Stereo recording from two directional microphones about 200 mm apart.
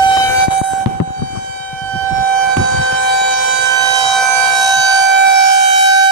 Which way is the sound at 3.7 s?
20° right (ahead or behind).